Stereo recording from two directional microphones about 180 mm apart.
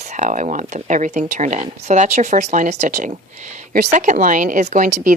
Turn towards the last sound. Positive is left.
turn(degrees=-45)  # may be behind; listen again after turning